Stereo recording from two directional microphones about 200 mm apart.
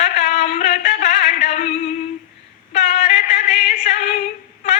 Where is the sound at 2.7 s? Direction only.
35° left (ahead or behind).